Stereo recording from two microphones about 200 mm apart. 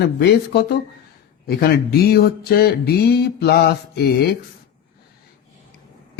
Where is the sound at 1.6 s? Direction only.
50° left (ahead or behind).